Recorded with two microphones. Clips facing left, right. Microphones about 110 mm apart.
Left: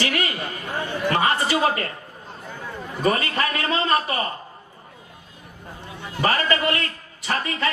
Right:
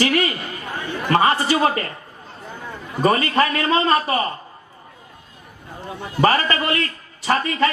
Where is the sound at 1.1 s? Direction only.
35° right (ahead or behind).